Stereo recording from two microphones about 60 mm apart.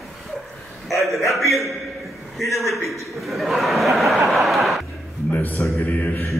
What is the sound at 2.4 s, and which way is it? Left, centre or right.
Speech, left.